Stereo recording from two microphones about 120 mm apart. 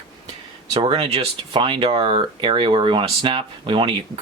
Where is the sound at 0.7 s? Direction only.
45° right (ahead or behind).